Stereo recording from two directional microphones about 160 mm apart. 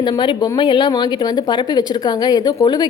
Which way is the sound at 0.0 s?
30° left (ahead or behind).